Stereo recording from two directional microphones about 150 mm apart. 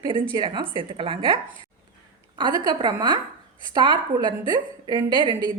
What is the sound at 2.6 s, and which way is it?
A woman's voice, 30° right (ahead or behind).